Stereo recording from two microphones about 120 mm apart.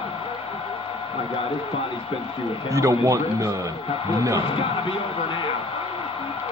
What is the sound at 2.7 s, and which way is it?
A man's voice, 25° right (ahead or behind).